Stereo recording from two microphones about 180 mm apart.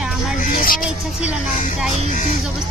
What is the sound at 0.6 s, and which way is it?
Speech, 50° left (ahead or behind).